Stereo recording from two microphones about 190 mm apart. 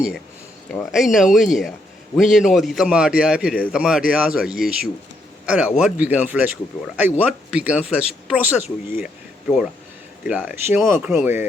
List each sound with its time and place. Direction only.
0.7 s a man's voice: centre (ahead or behind)
9.0 s a sound: 5° right (ahead or behind)
10.2 s speech: 5° right (ahead or behind)